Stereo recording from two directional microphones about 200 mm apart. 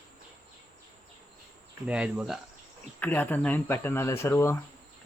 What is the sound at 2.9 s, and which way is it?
Speech, 10° left (ahead or behind).